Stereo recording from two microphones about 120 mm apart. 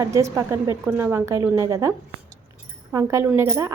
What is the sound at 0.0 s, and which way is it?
A woman's voice, 25° right (ahead or behind).